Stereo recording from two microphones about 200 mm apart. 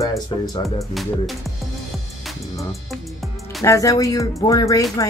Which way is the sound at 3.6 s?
15° left (ahead or behind).